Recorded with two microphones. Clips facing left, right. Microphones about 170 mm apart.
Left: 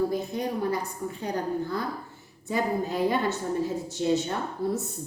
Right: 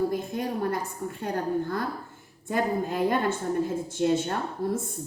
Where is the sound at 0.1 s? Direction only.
50° right (ahead or behind).